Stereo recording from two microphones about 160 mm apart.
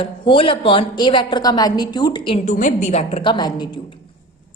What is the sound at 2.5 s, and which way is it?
A woman's voice, 50° left (ahead or behind).